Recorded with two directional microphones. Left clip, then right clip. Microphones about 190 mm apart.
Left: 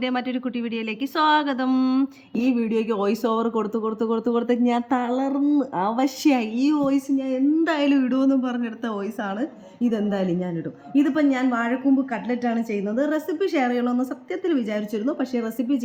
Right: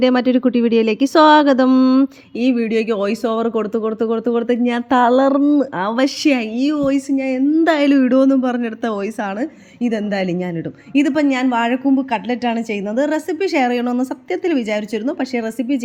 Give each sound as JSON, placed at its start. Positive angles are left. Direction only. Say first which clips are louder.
{"t": 0.0, "sound": "speech", "louder": "right 11 dB", "side_deg": -35}
{"t": 2.4, "sound": "speech", "louder": "right 6 dB", "side_deg": -10}
{"t": 9.8, "sound": "speech", "louder": "right 4 dB", "side_deg": -10}